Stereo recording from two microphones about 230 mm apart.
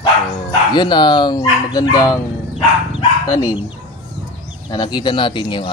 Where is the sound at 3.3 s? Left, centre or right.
Centre.